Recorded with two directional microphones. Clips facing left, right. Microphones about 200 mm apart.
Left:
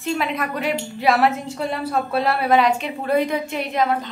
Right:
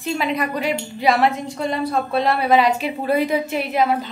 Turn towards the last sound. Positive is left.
turn(degrees=-5)  # may be behind; listen again after turning